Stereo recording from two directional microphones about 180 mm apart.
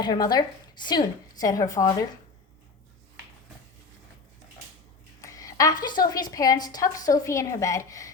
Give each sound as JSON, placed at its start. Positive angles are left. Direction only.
{"t": 0.0, "sound": "a woman's voice", "side_deg": 25}
{"t": 5.2, "sound": "a woman's voice", "side_deg": 20}